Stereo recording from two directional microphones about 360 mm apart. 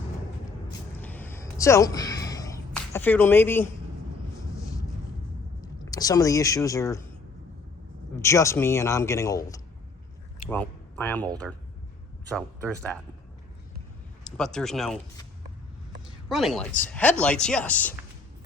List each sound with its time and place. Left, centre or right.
0.9 s a sound: centre
5.6 s speech: centre
8.1 s a man's voice: centre
12.3 s speech: centre
14.3 s speech: centre
16.0 s a sound: centre
16.8 s speech: centre